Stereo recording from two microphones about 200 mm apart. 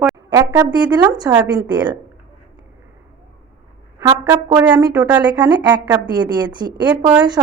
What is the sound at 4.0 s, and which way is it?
A woman's voice, 10° right (ahead or behind).